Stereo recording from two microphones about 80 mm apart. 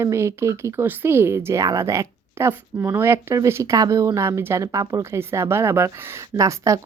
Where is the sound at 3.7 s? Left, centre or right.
Right.